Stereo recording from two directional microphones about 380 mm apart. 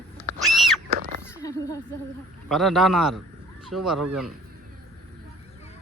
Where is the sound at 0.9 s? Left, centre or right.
Right.